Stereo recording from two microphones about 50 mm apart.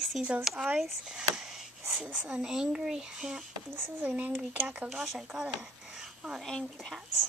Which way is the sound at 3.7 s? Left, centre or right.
Right.